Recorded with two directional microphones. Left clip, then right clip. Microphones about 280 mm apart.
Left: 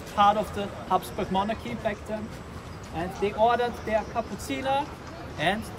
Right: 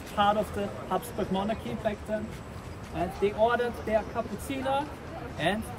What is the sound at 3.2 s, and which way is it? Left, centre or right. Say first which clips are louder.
Speech: left 3 dB; centre.